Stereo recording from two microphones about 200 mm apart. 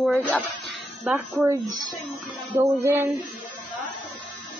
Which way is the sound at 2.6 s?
10° right (ahead or behind).